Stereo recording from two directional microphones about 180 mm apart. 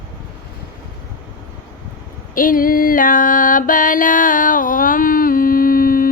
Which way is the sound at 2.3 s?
50° left (ahead or behind).